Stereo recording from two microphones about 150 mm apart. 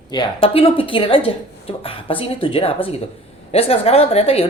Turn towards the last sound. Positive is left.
turn(degrees=40)  # may be behind; listen again after turning